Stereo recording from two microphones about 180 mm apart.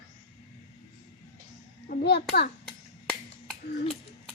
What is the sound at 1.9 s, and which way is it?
Speech, 65° left (ahead or behind).